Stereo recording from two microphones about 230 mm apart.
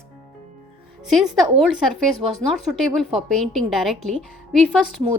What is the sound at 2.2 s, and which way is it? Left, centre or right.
Speech, right.